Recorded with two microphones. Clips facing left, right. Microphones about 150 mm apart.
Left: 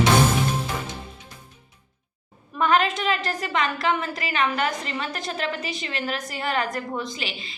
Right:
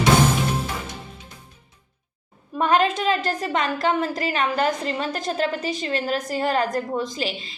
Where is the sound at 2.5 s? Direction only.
35° right (ahead or behind).